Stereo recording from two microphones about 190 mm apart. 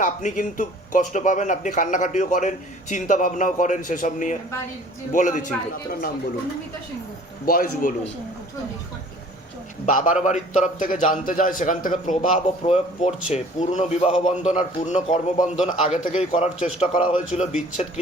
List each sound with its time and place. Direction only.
0.0 s a man's voice: 45° left (ahead or behind)
7.4 s a man's voice: 50° left (ahead or behind)
9.8 s a man's voice: 45° left (ahead or behind)